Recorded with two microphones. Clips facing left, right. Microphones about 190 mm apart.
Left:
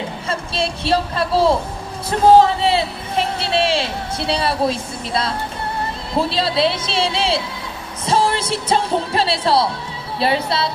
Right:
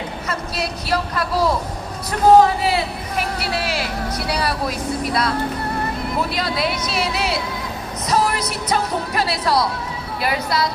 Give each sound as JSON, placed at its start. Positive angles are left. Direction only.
{"t": 0.3, "sound": "speech", "side_deg": 30}
{"t": 2.6, "sound": "speech", "side_deg": 25}